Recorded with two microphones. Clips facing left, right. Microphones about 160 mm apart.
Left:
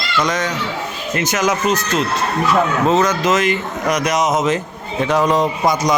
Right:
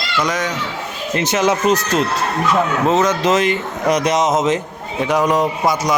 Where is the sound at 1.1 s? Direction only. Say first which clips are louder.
Right 2 dB; 30° right (ahead or behind).